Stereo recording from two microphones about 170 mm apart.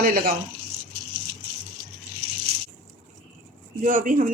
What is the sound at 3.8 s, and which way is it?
Speech, 50° right (ahead or behind).